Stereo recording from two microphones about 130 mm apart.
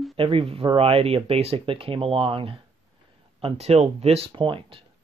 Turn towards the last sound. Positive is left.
turn(degrees=-40)  # may be behind; listen again after turning